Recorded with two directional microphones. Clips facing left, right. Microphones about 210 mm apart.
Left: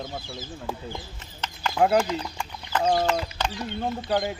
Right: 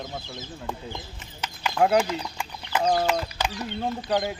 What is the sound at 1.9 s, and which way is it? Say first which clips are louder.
Chicken: even; 5° right (ahead or behind).